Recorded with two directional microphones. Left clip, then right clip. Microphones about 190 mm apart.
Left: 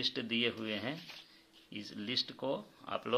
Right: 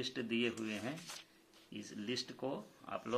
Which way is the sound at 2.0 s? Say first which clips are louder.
Left 6 dB; 35° left (ahead or behind).